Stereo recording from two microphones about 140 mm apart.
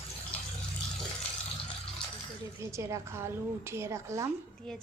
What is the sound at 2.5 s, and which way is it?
A woman's voice, 20° right (ahead or behind).